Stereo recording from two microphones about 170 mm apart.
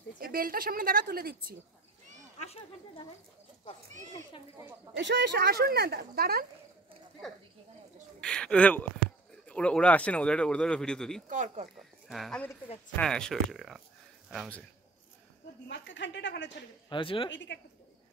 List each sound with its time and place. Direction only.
0.2 s a woman's voice: 55° right (ahead or behind)
2.3 s speech: 40° left (ahead or behind)
4.9 s speech: 90° right; by 6.4 s 65° right (ahead or behind)
8.2 s speech: 5° left (ahead or behind)
11.2 s speech: 45° right (ahead or behind)
12.1 s speech: centre (ahead or behind)
15.7 s speech: 90° left
16.9 s speech: 30° left (ahead or behind)
17.3 s speech: 90° left